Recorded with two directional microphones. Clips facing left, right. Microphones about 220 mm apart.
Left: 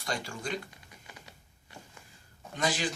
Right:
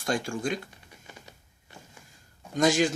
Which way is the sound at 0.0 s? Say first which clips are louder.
Right 7 dB; 50° right (ahead or behind).